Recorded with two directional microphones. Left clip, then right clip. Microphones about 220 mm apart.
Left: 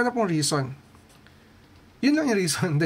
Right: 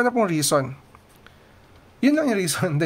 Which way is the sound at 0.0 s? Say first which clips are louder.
Right 3 dB; 25° right (ahead or behind).